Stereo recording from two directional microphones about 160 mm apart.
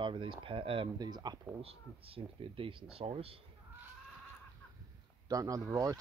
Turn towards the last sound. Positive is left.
turn(degrees=-20)  # may be behind; listen again after turning